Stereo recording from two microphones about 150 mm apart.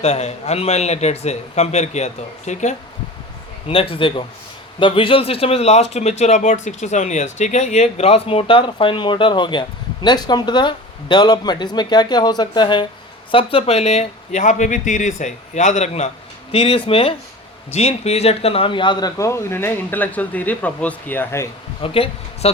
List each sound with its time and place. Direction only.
0.0 s speech: 45° left (ahead or behind)
3.7 s speech: 35° left (ahead or behind); by 21.4 s 10° left (ahead or behind)
21.8 s speech: 40° left (ahead or behind)